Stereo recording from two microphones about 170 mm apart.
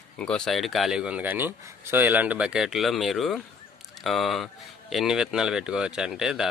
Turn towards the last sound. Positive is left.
turn(degrees=-5)  # may be behind; listen again after turning